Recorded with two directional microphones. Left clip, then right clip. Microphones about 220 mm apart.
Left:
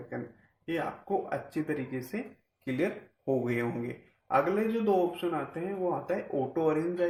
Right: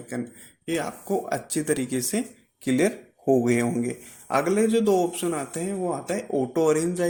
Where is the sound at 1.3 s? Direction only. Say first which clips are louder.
Right 7 dB; 45° right (ahead or behind).